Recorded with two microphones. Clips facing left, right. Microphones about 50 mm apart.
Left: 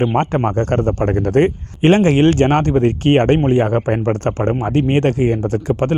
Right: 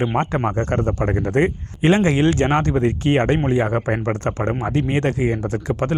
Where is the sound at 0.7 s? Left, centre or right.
Left.